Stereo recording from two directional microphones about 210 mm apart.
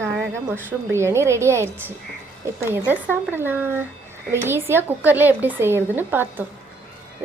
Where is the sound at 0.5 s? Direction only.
10° right (ahead or behind).